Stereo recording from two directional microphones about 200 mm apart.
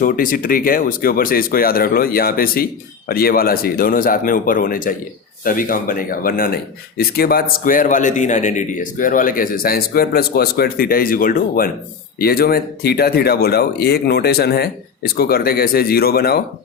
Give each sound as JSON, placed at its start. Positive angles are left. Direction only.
{"t": 0.0, "sound": "speech", "side_deg": 45}